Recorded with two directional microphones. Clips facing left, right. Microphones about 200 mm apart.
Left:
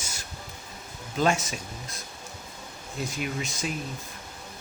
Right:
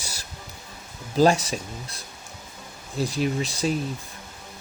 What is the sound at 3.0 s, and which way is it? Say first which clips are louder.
Speech: right 7 dB; 35° right (ahead or behind).